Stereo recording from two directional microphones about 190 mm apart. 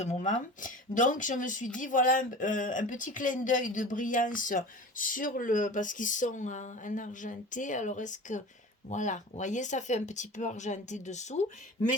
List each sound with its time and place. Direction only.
0.0 s speech: 40° left (ahead or behind)